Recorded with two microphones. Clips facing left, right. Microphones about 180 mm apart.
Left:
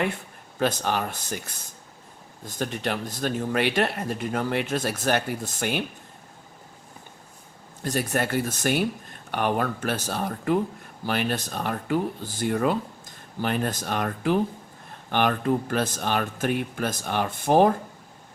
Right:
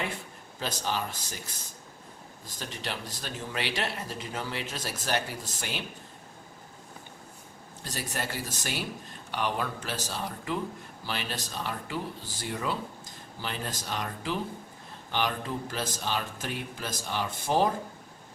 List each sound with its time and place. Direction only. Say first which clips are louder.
0.6 s speech: left 7 dB; 55° left (ahead or behind)
2.6 s speech: left 9 dB; 55° left (ahead or behind)
7.9 s speech: left 10 dB; 55° left (ahead or behind)